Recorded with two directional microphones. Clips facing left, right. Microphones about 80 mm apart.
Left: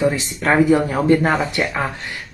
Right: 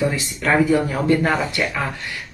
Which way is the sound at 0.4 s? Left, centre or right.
Left.